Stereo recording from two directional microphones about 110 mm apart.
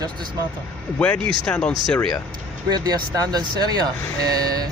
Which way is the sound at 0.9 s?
10° left (ahead or behind).